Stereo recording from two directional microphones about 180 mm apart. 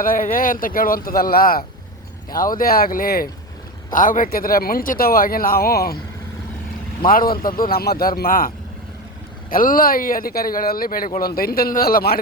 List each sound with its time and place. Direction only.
0.0 s speech: 50° left (ahead or behind)
7.1 s speech: 55° left (ahead or behind)